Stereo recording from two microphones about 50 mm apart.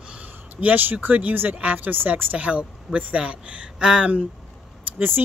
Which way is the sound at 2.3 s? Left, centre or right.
Right.